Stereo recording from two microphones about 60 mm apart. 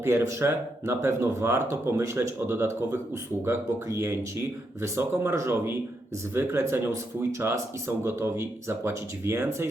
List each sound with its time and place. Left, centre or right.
0.0 s speech: right